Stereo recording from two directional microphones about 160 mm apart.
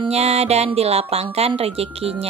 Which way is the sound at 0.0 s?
45° right (ahead or behind).